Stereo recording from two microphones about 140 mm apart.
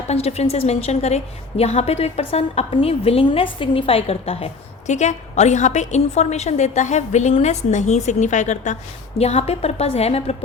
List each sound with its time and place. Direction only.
0.1 s a woman's voice: 50° left (ahead or behind)